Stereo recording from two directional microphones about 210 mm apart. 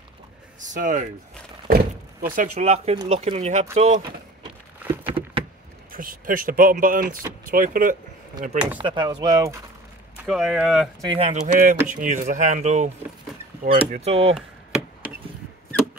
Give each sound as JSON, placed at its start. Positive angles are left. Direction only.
{"t": 0.6, "sound": "speech", "side_deg": -35}
{"t": 2.2, "sound": "speech", "side_deg": -40}
{"t": 5.0, "sound": "a sound", "side_deg": -25}
{"t": 5.9, "sound": "speech", "side_deg": -40}
{"t": 8.7, "sound": "speech", "side_deg": -20}
{"t": 10.2, "sound": "speech", "side_deg": 0}
{"t": 11.1, "sound": "speech", "side_deg": -30}
{"t": 13.6, "sound": "speech", "side_deg": -45}
{"t": 13.9, "sound": "speech", "side_deg": -30}